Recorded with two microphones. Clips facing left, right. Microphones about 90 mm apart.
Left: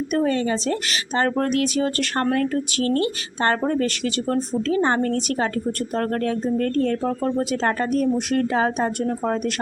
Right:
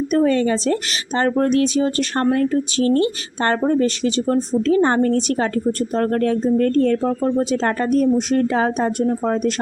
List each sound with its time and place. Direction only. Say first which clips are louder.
0.1 s a woman's voice: right 5 dB; 40° right (ahead or behind)
1.2 s a woman's voice: right 5 dB; 30° right (ahead or behind)
7.0 s speech: right 4 dB; 25° right (ahead or behind)
7.6 s a woman's voice: right 2 dB; 35° right (ahead or behind)